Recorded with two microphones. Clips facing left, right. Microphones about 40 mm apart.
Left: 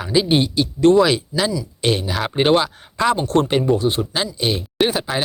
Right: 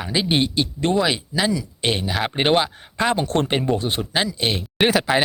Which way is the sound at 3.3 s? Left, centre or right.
Right.